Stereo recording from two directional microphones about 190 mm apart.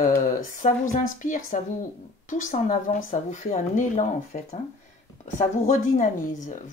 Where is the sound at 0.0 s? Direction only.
45° left (ahead or behind).